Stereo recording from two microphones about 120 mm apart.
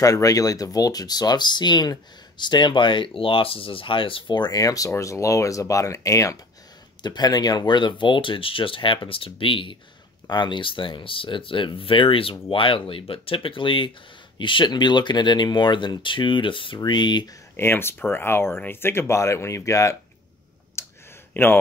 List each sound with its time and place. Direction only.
0.0 s speech: 30° left (ahead or behind)
17.6 s speech: 20° left (ahead or behind)
20.8 s clicking: 20° left (ahead or behind)
21.3 s speech: 20° left (ahead or behind)